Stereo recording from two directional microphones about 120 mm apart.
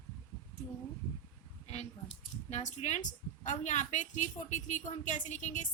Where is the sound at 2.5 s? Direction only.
80° left.